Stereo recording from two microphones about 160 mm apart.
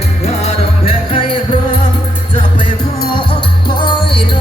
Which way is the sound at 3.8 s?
30° left (ahead or behind).